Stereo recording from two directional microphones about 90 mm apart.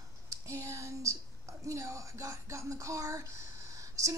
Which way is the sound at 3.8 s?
35° right (ahead or behind).